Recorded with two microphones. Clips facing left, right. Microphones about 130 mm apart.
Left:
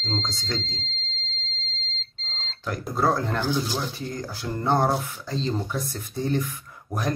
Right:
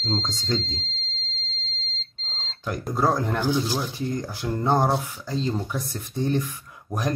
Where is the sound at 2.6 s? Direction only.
15° right (ahead or behind).